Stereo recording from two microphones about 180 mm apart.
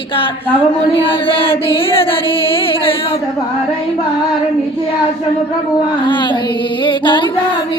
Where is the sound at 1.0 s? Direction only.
30° left (ahead or behind).